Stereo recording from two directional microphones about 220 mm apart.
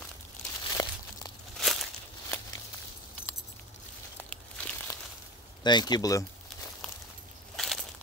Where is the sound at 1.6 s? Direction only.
Centre (ahead or behind).